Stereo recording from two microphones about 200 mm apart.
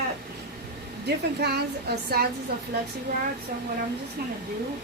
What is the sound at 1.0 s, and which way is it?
A woman's voice, 55° right (ahead or behind).